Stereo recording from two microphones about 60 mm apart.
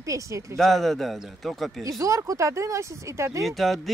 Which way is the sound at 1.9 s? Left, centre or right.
Right.